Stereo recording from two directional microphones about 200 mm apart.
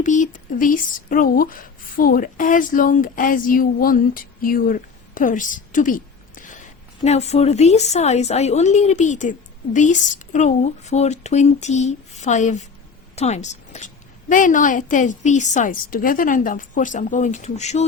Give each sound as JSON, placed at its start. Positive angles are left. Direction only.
{"t": 0.0, "sound": "speech", "side_deg": 40}